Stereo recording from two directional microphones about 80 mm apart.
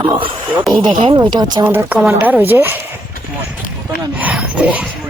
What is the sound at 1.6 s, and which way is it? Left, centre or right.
A woman's voice, right.